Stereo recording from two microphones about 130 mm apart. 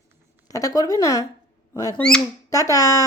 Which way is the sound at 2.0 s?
5° left (ahead or behind).